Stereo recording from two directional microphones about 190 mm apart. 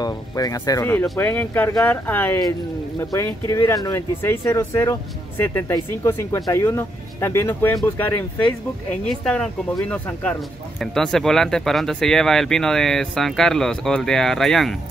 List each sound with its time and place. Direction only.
0.0 s speech: 20° left (ahead or behind); by 14.8 s centre (ahead or behind)